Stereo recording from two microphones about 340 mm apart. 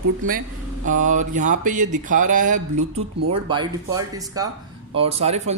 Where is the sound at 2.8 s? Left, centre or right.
Right.